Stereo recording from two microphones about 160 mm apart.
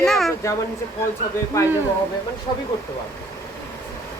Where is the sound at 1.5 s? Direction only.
20° left (ahead or behind).